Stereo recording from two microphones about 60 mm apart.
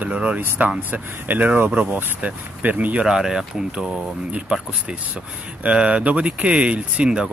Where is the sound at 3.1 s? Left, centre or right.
Centre.